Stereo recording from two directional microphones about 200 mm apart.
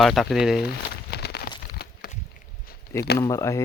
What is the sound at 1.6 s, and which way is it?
Crumpling, 50° left (ahead or behind).